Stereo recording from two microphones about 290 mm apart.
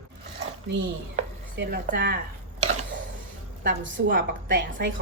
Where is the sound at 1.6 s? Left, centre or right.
Right.